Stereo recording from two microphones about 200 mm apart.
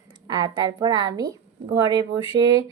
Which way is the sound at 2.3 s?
20° right (ahead or behind).